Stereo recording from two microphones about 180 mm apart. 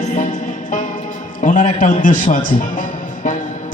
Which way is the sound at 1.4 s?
45° left (ahead or behind).